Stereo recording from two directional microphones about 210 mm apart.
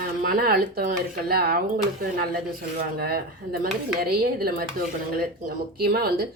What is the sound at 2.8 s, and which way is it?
Speech, 45° right (ahead or behind).